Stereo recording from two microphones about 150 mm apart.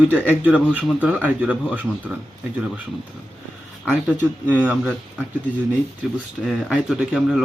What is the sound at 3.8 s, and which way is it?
Speech, 10° right (ahead or behind).